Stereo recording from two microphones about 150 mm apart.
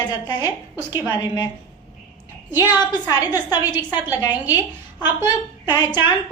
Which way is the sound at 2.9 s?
25° left (ahead or behind).